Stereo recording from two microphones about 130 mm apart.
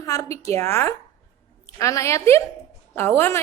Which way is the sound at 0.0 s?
25° left (ahead or behind).